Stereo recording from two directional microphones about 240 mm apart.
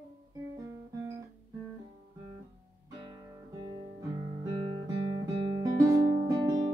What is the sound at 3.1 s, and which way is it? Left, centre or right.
Guitar, centre.